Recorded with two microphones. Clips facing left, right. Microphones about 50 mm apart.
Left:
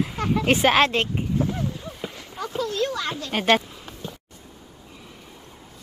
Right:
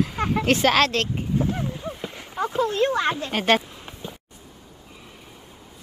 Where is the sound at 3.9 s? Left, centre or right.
Right.